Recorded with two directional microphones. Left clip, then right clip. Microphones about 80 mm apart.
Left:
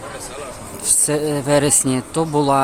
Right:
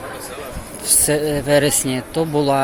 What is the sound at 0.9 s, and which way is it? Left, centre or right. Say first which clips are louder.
Speech: right 1 dB; left.